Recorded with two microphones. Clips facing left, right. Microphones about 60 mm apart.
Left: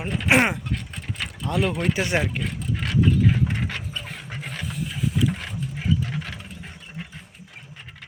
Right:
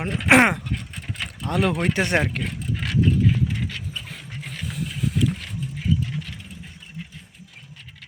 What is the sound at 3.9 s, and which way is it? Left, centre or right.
Pant, left.